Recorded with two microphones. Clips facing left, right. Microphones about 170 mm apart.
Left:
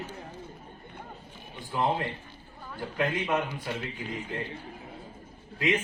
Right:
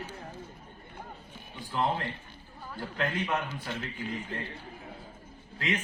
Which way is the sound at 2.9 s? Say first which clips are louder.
Left 3 dB; 10° left (ahead or behind).